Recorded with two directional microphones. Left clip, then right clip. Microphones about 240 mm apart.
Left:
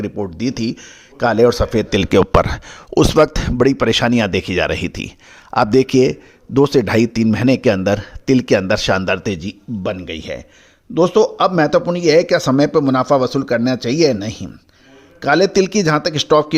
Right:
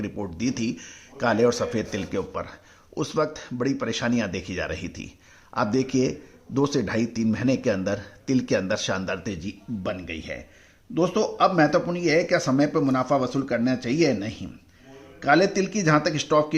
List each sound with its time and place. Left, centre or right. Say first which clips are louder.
0.0 s speech: left 8 dB; left